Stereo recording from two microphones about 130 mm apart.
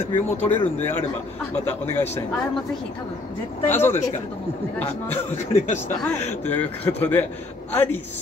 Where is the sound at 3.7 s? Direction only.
15° left (ahead or behind).